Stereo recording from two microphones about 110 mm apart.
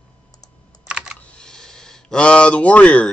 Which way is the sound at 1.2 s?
10° left (ahead or behind).